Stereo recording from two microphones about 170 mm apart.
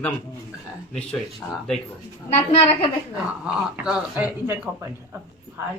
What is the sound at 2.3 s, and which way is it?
Speech, 35° left (ahead or behind).